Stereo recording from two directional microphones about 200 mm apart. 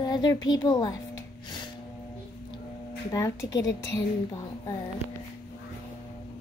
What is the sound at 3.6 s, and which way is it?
Speech, 65° left (ahead or behind).